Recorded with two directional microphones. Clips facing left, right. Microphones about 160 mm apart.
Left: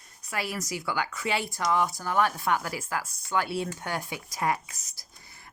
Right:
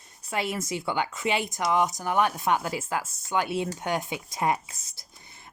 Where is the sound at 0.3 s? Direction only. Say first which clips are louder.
Right 3 dB; 25° right (ahead or behind).